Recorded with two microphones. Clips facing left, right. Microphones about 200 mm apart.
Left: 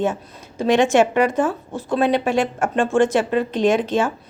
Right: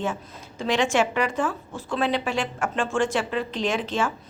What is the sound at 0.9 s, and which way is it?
Speech, 50° left (ahead or behind).